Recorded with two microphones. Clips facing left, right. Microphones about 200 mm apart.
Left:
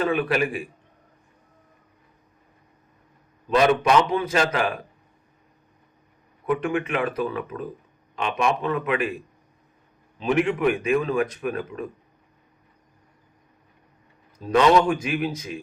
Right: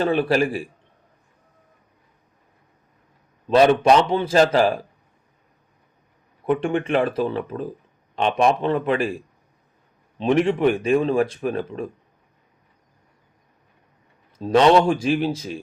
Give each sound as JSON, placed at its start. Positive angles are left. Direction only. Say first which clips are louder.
{"t": 0.0, "sound": "speech", "louder": "right 3 dB", "side_deg": -30}
{"t": 3.4, "sound": "speech", "louder": "right 4 dB", "side_deg": -30}
{"t": 6.4, "sound": "speech", "louder": "right 3 dB", "side_deg": -30}
{"t": 10.2, "sound": "speech", "louder": "right 3 dB", "side_deg": -30}
{"t": 14.3, "sound": "speech", "louder": "right 3 dB", "side_deg": -30}